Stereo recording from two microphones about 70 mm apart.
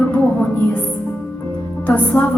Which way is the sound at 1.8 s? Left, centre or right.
Left.